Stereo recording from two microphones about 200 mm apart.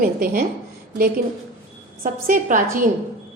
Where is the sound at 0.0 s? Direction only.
45° right (ahead or behind).